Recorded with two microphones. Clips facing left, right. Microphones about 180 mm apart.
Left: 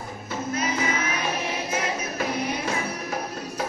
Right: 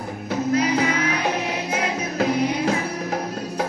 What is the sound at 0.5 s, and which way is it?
Music, 70° right (ahead or behind).